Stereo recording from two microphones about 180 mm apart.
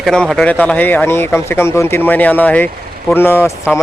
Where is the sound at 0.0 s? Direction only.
Centre (ahead or behind).